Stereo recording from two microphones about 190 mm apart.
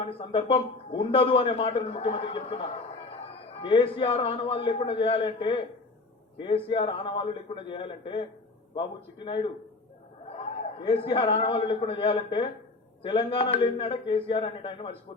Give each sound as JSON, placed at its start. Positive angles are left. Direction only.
{"t": 0.0, "sound": "a man's voice", "side_deg": 30}
{"t": 6.7, "sound": "a man's voice", "side_deg": 25}
{"t": 10.8, "sound": "a man's voice", "side_deg": 25}